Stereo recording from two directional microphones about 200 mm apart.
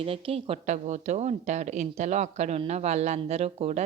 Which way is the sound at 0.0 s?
30° right (ahead or behind).